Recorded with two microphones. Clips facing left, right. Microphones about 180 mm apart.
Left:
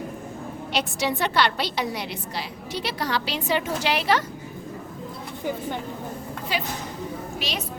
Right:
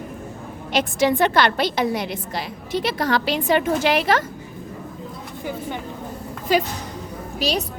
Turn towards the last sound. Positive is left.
turn(degrees=-40)  # may be behind; listen again after turning